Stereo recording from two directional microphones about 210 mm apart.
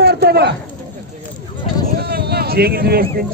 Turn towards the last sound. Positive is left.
turn(degrees=-45)  # may be behind; listen again after turning